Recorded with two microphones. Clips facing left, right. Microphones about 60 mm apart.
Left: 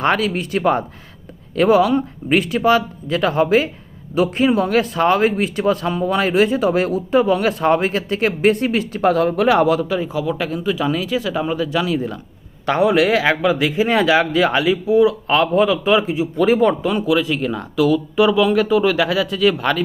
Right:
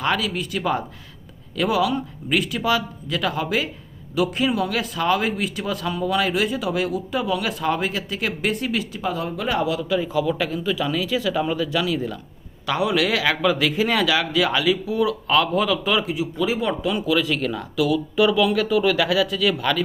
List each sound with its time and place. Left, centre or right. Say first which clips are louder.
0.0 s speech: left 5 dB; left
9.9 s speech: left 1 dB; left
16.4 s speech: left 9 dB; left
17.6 s speech: left 5 dB; left